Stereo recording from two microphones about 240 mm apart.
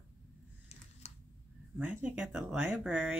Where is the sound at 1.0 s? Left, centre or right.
Left.